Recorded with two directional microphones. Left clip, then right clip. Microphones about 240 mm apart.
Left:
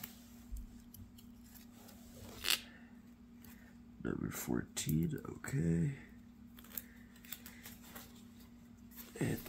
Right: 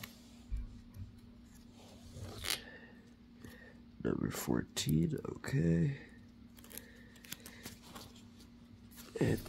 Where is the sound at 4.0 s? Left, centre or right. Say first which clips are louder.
Right 4 dB; right.